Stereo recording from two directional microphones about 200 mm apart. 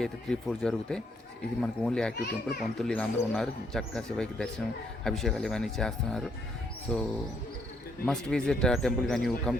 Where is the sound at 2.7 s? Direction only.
5° left (ahead or behind).